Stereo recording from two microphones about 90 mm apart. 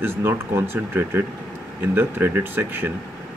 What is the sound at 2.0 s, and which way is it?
Speech, 25° right (ahead or behind).